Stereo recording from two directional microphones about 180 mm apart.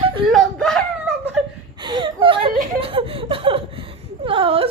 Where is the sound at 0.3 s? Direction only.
5° left (ahead or behind).